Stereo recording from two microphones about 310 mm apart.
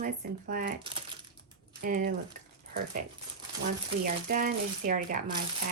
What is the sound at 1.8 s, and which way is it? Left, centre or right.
Speech, right.